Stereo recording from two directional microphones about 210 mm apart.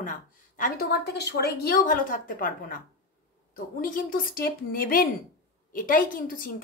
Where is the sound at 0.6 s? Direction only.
50° left (ahead or behind).